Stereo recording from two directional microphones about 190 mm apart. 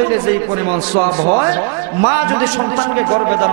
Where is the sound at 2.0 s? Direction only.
15° right (ahead or behind).